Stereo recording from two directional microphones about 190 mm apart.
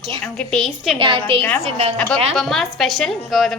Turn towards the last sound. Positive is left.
turn(degrees=0)  # may be behind; listen again after turning